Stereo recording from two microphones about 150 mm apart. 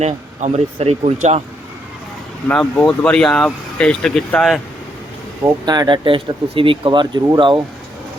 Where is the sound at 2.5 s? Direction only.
5° left (ahead or behind).